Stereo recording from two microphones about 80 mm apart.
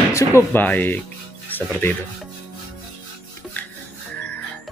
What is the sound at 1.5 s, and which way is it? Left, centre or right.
Music, left.